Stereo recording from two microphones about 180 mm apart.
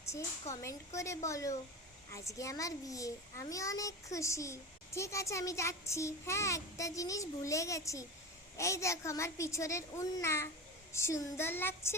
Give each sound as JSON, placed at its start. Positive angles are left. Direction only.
{"t": 0.5, "sound": "a child's voice", "side_deg": 20}